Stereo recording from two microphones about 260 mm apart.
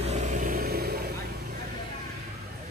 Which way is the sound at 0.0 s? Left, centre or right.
Right.